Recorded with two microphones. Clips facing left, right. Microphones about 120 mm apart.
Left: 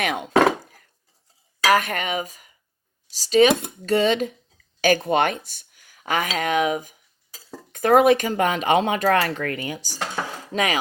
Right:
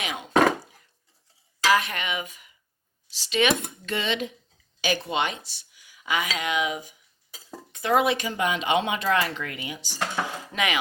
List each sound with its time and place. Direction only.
0.0 s a sound: 55° left (ahead or behind)
1.6 s cutlery: 50° left (ahead or behind)
3.1 s speech: 40° left (ahead or behind)